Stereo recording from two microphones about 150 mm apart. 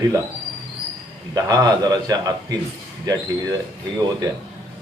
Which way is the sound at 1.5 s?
25° right (ahead or behind).